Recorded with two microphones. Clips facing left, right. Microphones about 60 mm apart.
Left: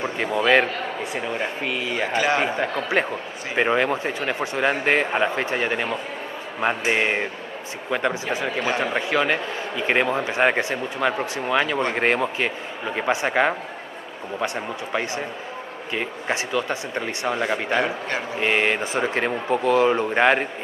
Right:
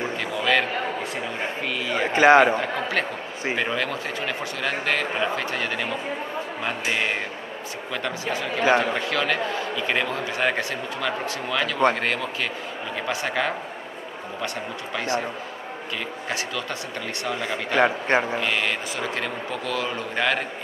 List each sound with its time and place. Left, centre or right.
0.0 s a man's voice: left
1.6 s a man's voice: centre
2.1 s a man's voice: right
2.6 s a man's voice: centre
17.7 s a man's voice: right
18.4 s a man's voice: left